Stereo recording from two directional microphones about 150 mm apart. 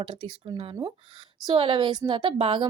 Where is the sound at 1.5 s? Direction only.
35° right (ahead or behind).